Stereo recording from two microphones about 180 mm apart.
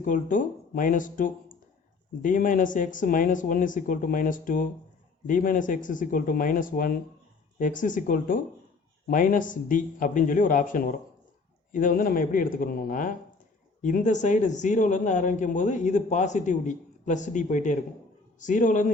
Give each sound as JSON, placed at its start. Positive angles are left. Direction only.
{"t": 0.0, "sound": "a man's voice", "side_deg": 45}